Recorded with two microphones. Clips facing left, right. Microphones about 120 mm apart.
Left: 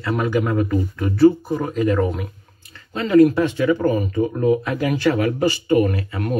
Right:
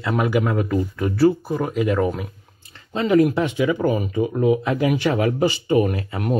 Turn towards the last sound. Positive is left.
turn(degrees=-25)  # may be behind; listen again after turning